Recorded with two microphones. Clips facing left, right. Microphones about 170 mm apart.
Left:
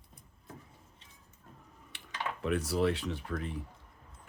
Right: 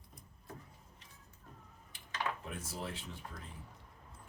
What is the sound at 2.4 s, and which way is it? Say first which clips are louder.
Speech: left 14 dB; 80° left.